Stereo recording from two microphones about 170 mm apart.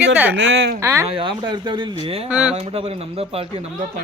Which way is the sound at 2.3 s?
5° right (ahead or behind).